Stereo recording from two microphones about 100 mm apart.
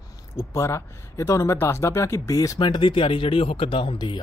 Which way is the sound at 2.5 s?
50° left (ahead or behind).